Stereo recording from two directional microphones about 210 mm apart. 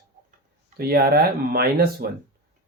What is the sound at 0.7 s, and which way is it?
Speech, 45° right (ahead or behind).